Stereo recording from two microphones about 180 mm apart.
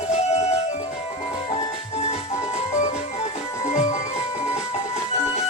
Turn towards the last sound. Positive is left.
turn(degrees=40)  # may be behind; listen again after turning